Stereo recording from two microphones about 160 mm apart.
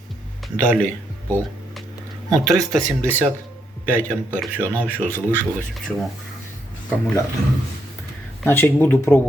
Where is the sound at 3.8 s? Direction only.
10° left (ahead or behind).